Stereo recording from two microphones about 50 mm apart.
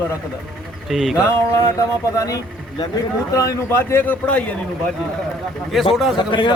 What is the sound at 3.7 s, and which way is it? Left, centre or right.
Speech, left.